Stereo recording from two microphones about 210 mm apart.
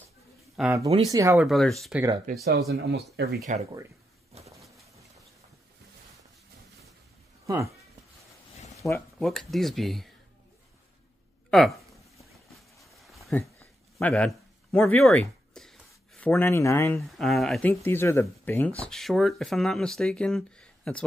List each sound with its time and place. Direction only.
0.6 s speech: 10° right (ahead or behind)
2.3 s speech: 40° right (ahead or behind)
2.7 s speech: 50° right (ahead or behind)
4.3 s a sound: 30° right (ahead or behind)
7.4 s speech: 15° right (ahead or behind)
8.7 s a sound: 15° left (ahead or behind)
9.2 s speech: centre (ahead or behind)
12.8 s a sound: centre (ahead or behind)
17.2 s speech: centre (ahead or behind)